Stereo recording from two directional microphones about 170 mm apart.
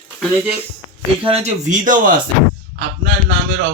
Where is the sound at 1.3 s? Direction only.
45° right (ahead or behind).